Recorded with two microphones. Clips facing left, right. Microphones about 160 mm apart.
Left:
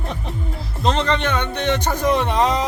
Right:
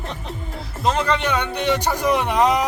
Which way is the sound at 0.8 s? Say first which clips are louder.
Left 1 dB; 10° right (ahead or behind).